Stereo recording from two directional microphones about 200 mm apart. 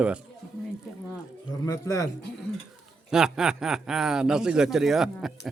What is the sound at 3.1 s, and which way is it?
Speech, 5° right (ahead or behind).